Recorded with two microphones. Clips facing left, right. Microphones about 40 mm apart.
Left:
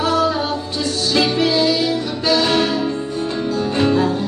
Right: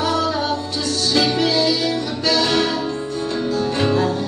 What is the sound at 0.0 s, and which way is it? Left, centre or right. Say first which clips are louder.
Music: left 2 dB; centre.